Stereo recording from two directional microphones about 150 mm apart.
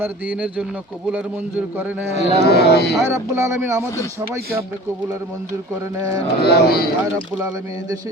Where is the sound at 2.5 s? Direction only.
90° left.